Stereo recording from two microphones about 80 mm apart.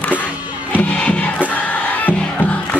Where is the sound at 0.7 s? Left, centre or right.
Centre.